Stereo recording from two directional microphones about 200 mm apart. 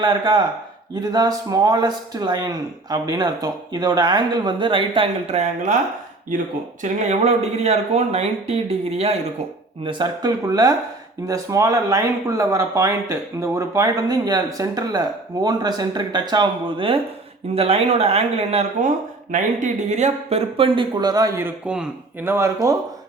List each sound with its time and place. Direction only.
0.0 s speech: 20° right (ahead or behind)
6.8 s speech: 35° right (ahead or behind); by 22.5 s 10° right (ahead or behind)